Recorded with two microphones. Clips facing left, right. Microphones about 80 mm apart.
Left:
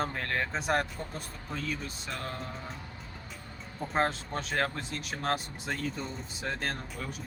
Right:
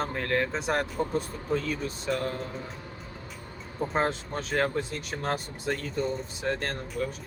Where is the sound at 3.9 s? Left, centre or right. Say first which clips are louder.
Even; centre.